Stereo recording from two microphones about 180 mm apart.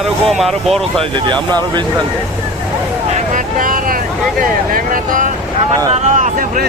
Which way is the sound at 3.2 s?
45° right (ahead or behind).